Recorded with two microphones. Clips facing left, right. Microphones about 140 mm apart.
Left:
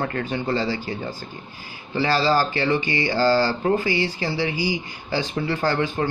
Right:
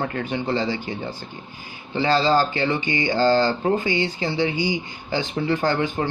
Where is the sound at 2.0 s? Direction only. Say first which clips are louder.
Right 1 dB; 20° right (ahead or behind).